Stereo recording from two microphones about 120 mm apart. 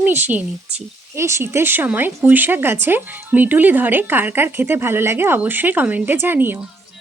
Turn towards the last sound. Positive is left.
turn(degrees=-15)  # may be behind; listen again after turning